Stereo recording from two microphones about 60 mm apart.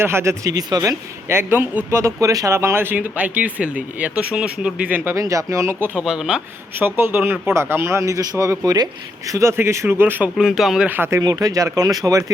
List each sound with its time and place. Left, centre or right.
0.0 s speech: right
0.4 s speech: right
1.3 s speech: right
2.2 s speech: right
2.5 s speech: right
2.9 s speech: right
5.1 s speech: right
6.0 s speech: centre
6.7 s speech: right
9.2 s speech: right
9.5 s speech: right
10.3 s speech: centre
10.8 s speech: right
11.2 s speech: right